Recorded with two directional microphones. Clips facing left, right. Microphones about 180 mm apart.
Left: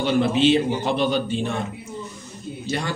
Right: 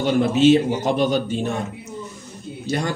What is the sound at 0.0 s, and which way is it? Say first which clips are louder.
A man's voice: right 3 dB; 45° right (ahead or behind).